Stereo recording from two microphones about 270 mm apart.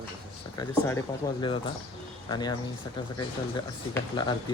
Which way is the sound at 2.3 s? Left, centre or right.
Centre.